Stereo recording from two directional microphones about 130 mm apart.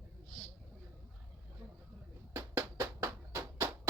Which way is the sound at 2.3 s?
20° right (ahead or behind).